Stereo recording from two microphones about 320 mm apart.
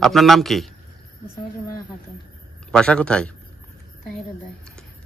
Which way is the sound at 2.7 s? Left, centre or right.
Centre.